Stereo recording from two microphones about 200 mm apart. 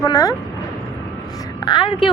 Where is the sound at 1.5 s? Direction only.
20° left (ahead or behind).